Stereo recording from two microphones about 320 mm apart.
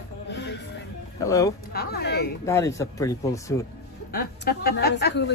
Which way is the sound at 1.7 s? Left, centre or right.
Left.